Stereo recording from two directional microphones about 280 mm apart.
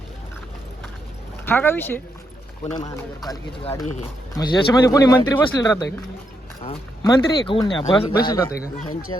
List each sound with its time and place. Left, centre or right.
1.5 s speech: centre